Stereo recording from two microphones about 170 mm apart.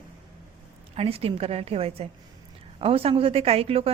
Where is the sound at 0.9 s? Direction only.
35° right (ahead or behind).